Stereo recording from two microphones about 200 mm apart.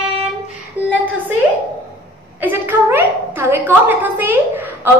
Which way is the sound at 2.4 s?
10° right (ahead or behind).